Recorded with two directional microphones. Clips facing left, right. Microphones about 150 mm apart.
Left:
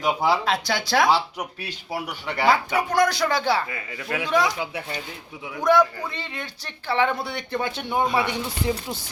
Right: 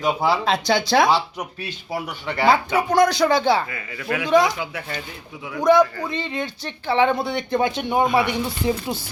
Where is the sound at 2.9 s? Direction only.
20° right (ahead or behind).